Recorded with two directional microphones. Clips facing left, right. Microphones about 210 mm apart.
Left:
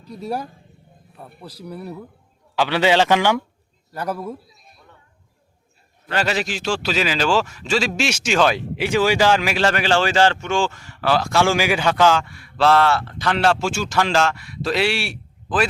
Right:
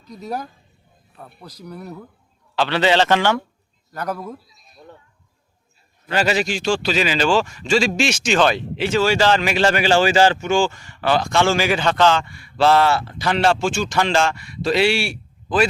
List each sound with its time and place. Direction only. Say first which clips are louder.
1.1 s a man's voice: left 1 dB; 5° left (ahead or behind)
6.1 s a man's voice: right 3 dB; 5° right (ahead or behind)